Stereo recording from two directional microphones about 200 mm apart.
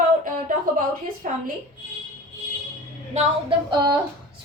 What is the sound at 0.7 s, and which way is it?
Speech, 45° right (ahead or behind).